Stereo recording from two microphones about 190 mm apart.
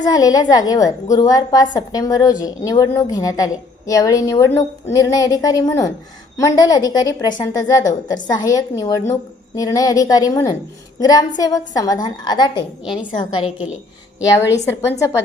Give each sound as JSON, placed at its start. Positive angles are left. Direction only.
{"t": 0.0, "sound": "a woman's voice", "side_deg": 20}
{"t": 14.3, "sound": "speech", "side_deg": 15}